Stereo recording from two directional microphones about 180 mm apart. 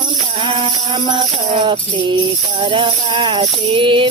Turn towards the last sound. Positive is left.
turn(degrees=-30)  # may be behind; listen again after turning